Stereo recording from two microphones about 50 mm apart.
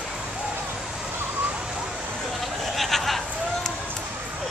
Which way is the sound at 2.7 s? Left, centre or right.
Centre.